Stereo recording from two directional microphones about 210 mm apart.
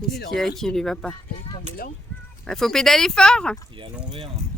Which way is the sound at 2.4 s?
Centre (ahead or behind).